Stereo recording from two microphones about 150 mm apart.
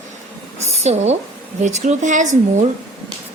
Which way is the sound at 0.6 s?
45° right (ahead or behind).